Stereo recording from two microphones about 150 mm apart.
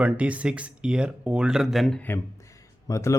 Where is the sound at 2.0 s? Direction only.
20° left (ahead or behind).